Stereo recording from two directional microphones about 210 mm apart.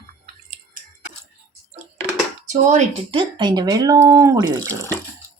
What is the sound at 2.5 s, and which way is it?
A woman's voice, 35° right (ahead or behind).